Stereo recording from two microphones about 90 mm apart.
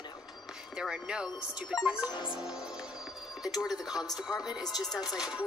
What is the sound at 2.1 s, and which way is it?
Music, 65° left (ahead or behind).